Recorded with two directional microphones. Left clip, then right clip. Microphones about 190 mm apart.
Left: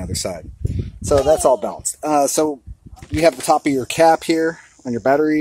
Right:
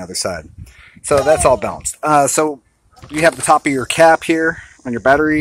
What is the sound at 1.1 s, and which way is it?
Speech, 15° right (ahead or behind).